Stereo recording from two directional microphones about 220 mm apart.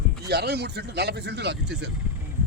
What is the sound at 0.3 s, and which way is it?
A man's voice, 50° right (ahead or behind).